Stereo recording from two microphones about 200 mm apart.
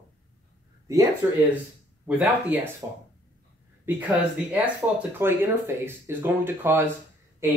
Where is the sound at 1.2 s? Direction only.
10° right (ahead or behind).